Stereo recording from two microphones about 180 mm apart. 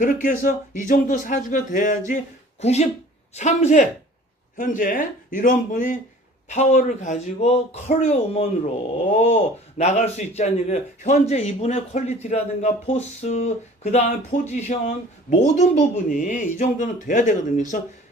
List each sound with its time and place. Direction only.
0.0 s speech: 50° left (ahead or behind)